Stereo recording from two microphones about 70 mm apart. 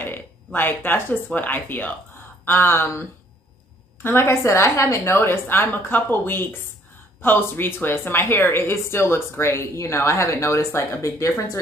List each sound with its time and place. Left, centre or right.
0.0 s a woman's voice: left